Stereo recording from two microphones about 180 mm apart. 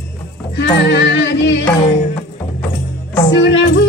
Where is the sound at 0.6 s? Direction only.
70° left (ahead or behind).